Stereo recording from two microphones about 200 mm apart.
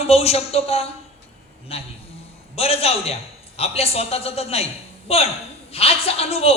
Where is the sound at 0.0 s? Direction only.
30° left (ahead or behind).